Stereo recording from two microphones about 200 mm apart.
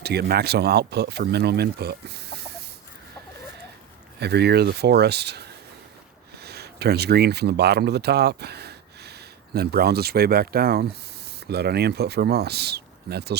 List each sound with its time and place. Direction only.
0.0 s speech: 55° right (ahead or behind)
4.2 s speech: 55° right (ahead or behind)